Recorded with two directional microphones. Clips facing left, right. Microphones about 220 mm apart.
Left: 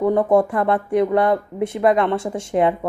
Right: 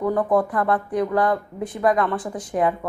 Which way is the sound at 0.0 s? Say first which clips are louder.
Left 4 dB; 25° left (ahead or behind).